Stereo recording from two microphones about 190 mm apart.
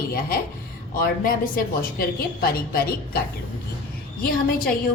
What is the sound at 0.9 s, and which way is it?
A woman's voice, 45° left (ahead or behind).